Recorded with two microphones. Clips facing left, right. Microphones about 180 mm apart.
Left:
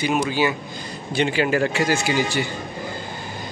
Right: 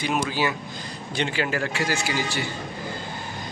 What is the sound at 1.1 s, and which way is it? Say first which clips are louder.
A man's voice: left 6 dB; 15° left (ahead or behind).